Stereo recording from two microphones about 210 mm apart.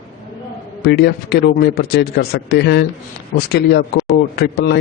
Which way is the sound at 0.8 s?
50° left (ahead or behind).